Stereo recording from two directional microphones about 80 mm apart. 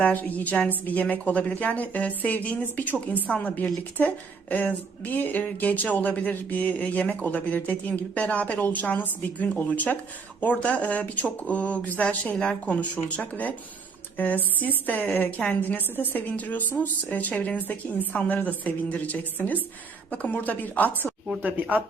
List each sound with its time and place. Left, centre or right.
0.0 s speech: centre